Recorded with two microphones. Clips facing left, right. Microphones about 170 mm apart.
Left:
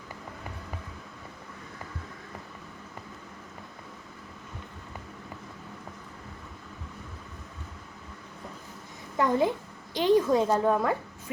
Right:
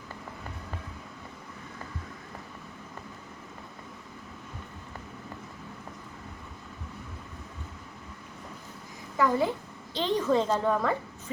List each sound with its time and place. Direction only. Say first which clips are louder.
9.1 s a child's voice: left 1 dB; 20° left (ahead or behind)